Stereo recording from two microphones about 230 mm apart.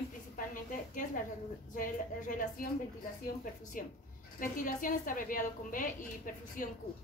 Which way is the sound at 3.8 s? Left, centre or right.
Left.